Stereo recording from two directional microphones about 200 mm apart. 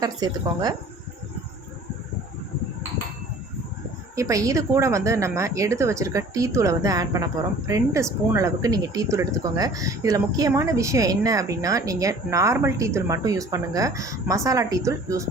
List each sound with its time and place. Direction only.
0.0 s a woman's voice: 20° right (ahead or behind)
4.1 s speech: 15° right (ahead or behind)